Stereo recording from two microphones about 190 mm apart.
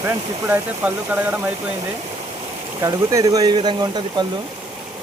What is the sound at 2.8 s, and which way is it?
Speech, 15° right (ahead or behind).